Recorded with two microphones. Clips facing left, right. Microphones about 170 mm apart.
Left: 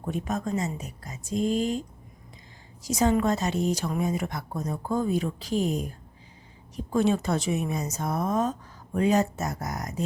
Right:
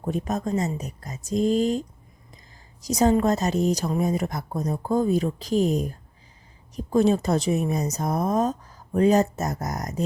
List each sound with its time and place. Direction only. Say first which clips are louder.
0.0 s speech: right 3 dB; 35° right (ahead or behind)
2.8 s speech: right 3 dB; 40° right (ahead or behind)